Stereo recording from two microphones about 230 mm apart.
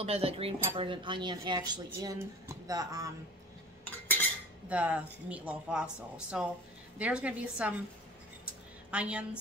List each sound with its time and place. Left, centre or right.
0.0 s speech: right
4.6 s speech: centre
8.9 s speech: centre